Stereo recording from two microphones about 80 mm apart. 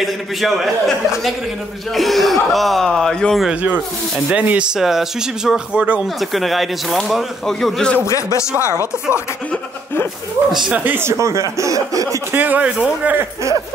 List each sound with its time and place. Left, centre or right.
0.0 s speech: centre
4.3 s speech: centre
4.7 s speech: centre
6.3 s speech: centre
8.0 s speech: left
10.5 s speech: centre
10.8 s speech: right
11.1 s speech: right
12.3 s speech: right